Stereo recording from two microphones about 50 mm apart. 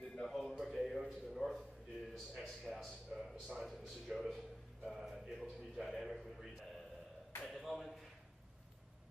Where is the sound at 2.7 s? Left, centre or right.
Centre.